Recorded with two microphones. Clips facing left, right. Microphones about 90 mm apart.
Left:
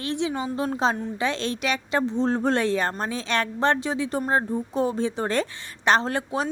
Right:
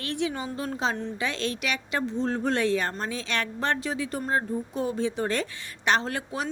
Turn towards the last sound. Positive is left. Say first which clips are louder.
# left 4 dB
turn(degrees=30)  # may be behind; listen again after turning